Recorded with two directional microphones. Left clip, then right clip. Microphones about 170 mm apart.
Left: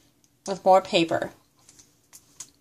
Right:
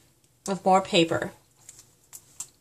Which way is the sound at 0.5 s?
20° left (ahead or behind).